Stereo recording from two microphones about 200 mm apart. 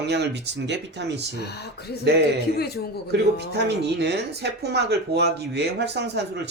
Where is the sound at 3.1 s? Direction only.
55° right (ahead or behind).